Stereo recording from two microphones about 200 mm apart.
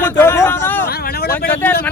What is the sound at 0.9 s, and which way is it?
Speech, 50° left (ahead or behind).